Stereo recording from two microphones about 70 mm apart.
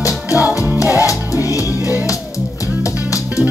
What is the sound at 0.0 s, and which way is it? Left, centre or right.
Music, left.